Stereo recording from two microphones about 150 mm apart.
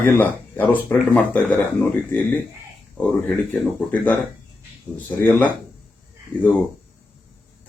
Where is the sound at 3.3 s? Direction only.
5° left (ahead or behind).